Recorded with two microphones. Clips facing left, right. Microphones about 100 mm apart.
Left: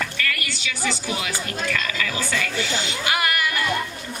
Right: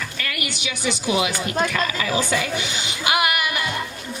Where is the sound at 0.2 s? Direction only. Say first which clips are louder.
Left 1 dB; 20° right (ahead or behind).